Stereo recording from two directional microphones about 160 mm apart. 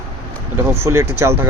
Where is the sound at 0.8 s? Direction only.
15° right (ahead or behind).